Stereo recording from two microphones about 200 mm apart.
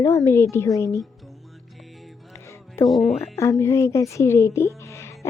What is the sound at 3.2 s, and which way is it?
A woman's voice, 15° left (ahead or behind).